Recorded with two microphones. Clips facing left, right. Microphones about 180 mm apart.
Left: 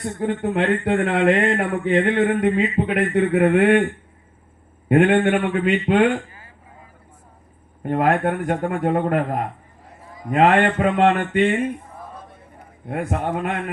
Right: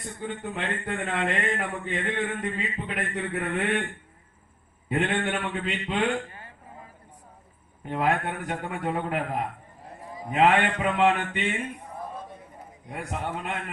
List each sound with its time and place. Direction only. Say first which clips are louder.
0.0 s speech: left 11 dB; 65° left (ahead or behind)
4.9 s mantra: left 11 dB; 60° left (ahead or behind)
7.9 s a man's voice: left 7 dB; 55° left (ahead or behind)
10.3 s mantra: left 6 dB; 50° left (ahead or behind)
12.9 s mantra: left 9 dB; 60° left (ahead or behind)